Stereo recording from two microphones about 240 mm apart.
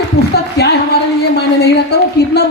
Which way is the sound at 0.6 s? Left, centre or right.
Left.